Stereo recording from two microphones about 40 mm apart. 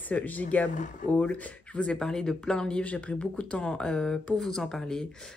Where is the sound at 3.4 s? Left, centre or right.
Left; by 5.0 s centre.